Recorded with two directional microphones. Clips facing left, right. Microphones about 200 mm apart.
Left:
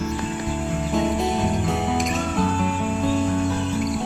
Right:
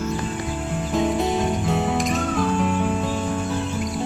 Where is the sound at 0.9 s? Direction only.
Centre (ahead or behind).